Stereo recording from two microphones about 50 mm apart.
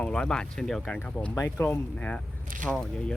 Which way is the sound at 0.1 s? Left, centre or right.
Centre.